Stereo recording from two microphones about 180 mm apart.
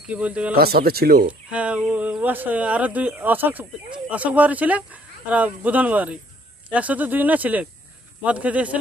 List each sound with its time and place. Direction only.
0.1 s speech: 5° right (ahead or behind)
0.6 s speech: 55° right (ahead or behind)
1.5 s speech: 5° right (ahead or behind)